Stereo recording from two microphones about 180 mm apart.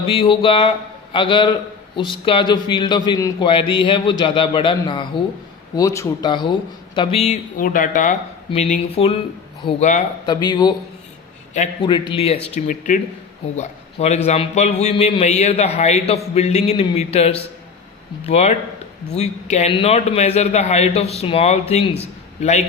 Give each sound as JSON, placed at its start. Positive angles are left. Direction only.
{"t": 0.0, "sound": "a man's voice", "side_deg": 30}
{"t": 7.5, "sound": "speech", "side_deg": 50}
{"t": 8.4, "sound": "a man's voice", "side_deg": 35}
{"t": 9.6, "sound": "a man's voice", "side_deg": 25}
{"t": 11.8, "sound": "a man's voice", "side_deg": 25}
{"t": 12.5, "sound": "a man's voice", "side_deg": 45}